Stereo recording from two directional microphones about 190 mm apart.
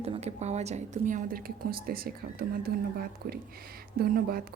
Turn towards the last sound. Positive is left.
turn(degrees=-50)  # may be behind; listen again after turning